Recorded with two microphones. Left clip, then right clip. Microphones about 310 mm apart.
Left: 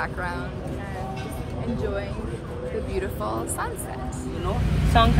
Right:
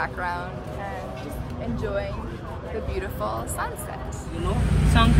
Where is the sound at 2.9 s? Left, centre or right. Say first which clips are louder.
Even; centre.